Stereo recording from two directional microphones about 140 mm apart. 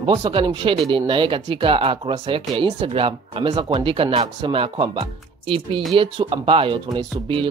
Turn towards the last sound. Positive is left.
turn(degrees=-35)  # may be behind; listen again after turning